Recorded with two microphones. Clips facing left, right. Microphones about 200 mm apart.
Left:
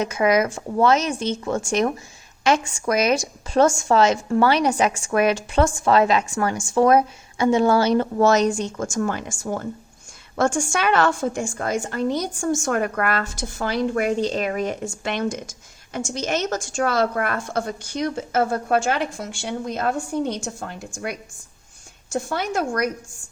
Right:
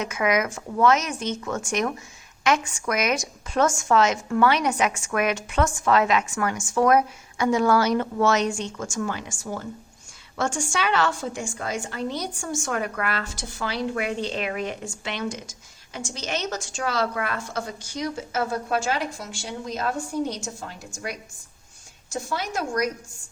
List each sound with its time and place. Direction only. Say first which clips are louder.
0.0 s a woman's voice: left 5 dB; 35° left (ahead or behind); by 22.9 s 55° left (ahead or behind)